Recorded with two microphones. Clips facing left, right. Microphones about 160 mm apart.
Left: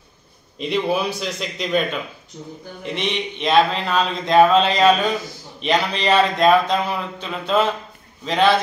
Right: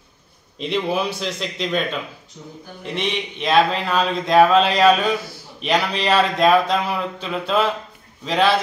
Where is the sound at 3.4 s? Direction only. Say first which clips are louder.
Even; centre (ahead or behind).